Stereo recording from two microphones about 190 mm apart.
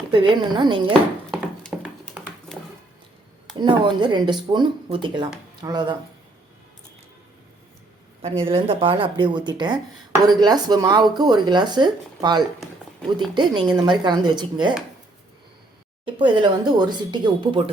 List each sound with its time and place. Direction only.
0.1 s speech: 25° right (ahead or behind)
1.3 s a sound: centre (ahead or behind)
3.6 s speech: 25° right (ahead or behind)
8.2 s speech: 30° right (ahead or behind)
16.0 s speech: 25° right (ahead or behind)